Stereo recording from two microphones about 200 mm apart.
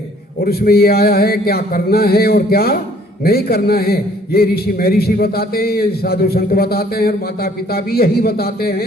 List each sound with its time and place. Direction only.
0.4 s a man's voice: 50° left (ahead or behind)